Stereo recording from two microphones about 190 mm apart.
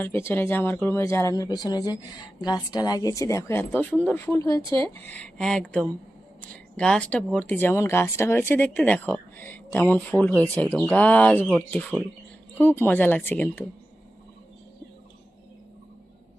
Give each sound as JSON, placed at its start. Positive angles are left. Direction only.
{"t": 0.0, "sound": "speech", "side_deg": 10}